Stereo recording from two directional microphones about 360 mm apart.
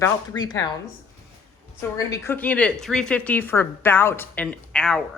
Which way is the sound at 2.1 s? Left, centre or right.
Centre.